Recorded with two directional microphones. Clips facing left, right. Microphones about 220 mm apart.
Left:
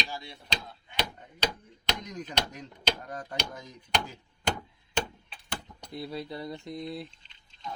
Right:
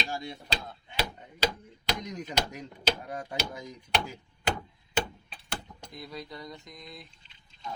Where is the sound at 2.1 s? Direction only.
10° right (ahead or behind).